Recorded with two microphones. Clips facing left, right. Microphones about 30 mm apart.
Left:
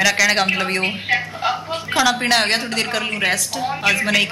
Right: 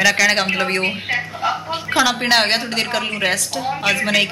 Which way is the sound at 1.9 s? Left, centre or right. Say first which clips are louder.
Right 1 dB; centre.